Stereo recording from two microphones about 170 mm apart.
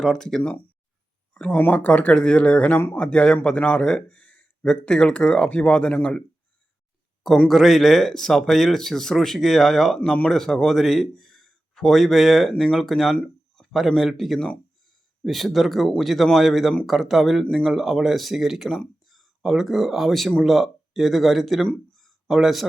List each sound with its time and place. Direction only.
0.0 s speech: centre (ahead or behind)
7.3 s speech: centre (ahead or behind)